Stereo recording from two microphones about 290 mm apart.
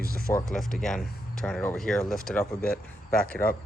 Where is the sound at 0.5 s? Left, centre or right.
Centre.